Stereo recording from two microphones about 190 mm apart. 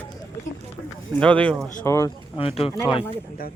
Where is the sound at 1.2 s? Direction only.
5° left (ahead or behind).